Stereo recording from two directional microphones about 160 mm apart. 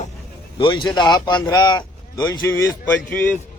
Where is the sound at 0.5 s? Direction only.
30° left (ahead or behind).